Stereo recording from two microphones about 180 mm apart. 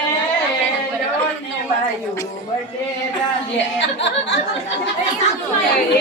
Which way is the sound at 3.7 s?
80° left.